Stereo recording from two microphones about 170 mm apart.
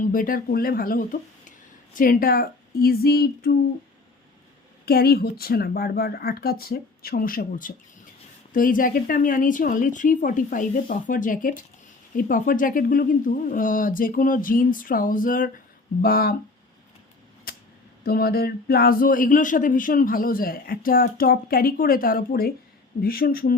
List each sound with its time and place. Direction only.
0.0 s speech: 55° left (ahead or behind)
4.9 s speech: 65° left (ahead or behind)
17.5 s a sound: 65° left (ahead or behind)
18.0 s speech: 65° left (ahead or behind)